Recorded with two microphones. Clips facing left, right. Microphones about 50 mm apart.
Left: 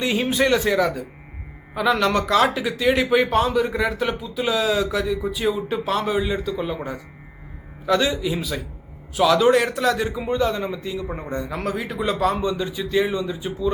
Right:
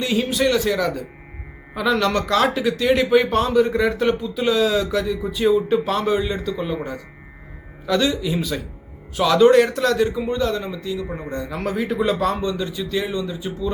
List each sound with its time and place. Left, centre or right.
0.0 s a man's voice: left
0.8 s a man's voice: centre
10.8 s a man's voice: left
11.5 s a man's voice: centre
12.4 s a man's voice: centre